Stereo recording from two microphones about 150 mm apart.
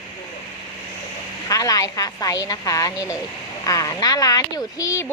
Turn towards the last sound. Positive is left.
turn(degrees=20)  # may be behind; listen again after turning